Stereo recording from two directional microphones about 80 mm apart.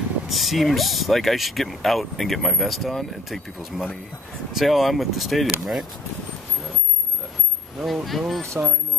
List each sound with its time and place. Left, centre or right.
0.3 s speech: centre
7.8 s speech: centre
8.5 s speech: right